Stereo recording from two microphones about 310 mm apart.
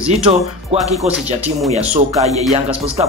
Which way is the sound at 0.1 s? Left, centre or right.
Centre.